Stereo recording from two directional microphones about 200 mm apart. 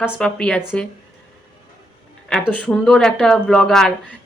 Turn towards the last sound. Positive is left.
turn(degrees=5)  # may be behind; listen again after turning